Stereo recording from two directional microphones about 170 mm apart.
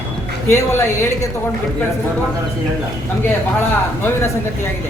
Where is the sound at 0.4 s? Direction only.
15° left (ahead or behind).